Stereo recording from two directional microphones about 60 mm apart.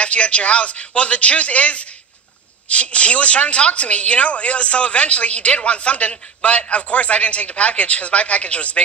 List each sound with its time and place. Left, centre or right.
0.0 s a woman's voice: left